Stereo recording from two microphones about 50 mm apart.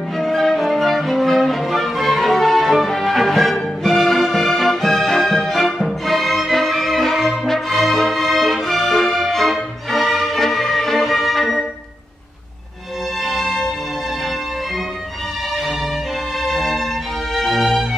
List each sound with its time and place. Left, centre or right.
0.2 s music: centre
13.2 s music: centre
16.4 s music: centre